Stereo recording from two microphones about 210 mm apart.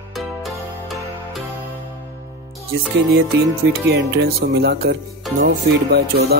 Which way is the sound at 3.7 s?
45° right (ahead or behind).